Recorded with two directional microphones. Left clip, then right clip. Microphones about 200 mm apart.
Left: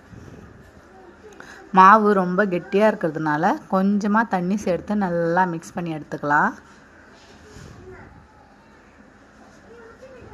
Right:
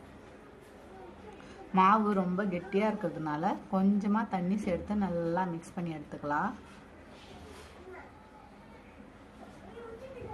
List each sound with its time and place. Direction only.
1.5 s speech: 25° left (ahead or behind)